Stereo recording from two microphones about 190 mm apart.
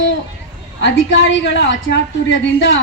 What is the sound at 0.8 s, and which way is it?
A woman's voice, 70° left (ahead or behind).